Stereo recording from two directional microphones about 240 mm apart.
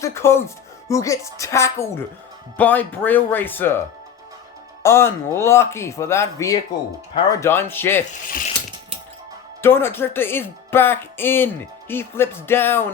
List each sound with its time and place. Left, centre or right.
0.0 s speech: centre
4.8 s speech: centre
8.3 s a sound: left
9.6 s speech: centre